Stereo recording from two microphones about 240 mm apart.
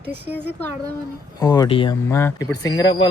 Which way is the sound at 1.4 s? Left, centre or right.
Centre.